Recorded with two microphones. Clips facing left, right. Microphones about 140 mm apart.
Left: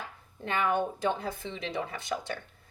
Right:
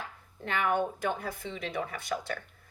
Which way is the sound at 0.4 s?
20° left (ahead or behind).